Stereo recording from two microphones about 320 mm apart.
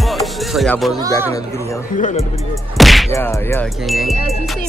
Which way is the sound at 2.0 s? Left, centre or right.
Left.